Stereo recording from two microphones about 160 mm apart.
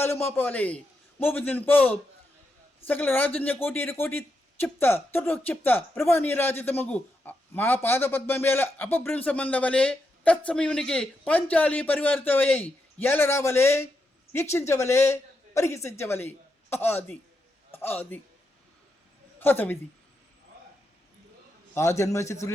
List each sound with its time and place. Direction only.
0.0 s a man's voice: 15° left (ahead or behind)
19.4 s a man's voice: 15° left (ahead or behind)
21.8 s a man's voice: 20° left (ahead or behind)